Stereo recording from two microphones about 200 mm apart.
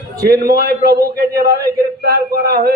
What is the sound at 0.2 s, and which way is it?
A man's voice, 50° right (ahead or behind).